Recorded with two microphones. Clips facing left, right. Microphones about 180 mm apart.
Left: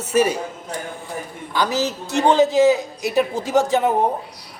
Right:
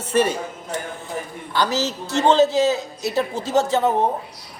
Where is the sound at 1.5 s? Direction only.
15° left (ahead or behind).